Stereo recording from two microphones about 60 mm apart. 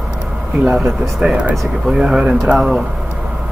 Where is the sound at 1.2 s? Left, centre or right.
Centre.